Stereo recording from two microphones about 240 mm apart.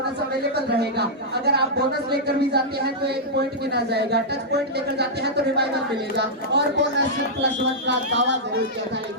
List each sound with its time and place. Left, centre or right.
0.5 s speech: right